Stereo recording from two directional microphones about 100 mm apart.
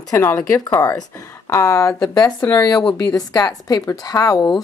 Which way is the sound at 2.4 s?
30° left (ahead or behind).